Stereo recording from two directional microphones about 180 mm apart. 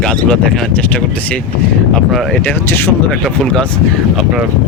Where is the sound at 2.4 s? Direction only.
10° left (ahead or behind).